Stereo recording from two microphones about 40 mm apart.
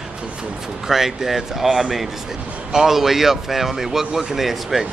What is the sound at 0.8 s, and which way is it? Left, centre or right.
Speech, centre.